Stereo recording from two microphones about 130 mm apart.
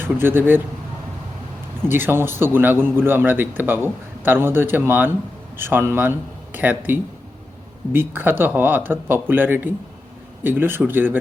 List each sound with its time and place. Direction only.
0.0 s a man's voice: 15° right (ahead or behind)
1.9 s a man's voice: 15° right (ahead or behind)